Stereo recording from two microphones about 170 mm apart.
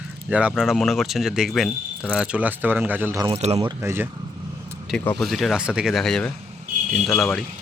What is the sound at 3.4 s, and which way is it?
Speech, 35° right (ahead or behind).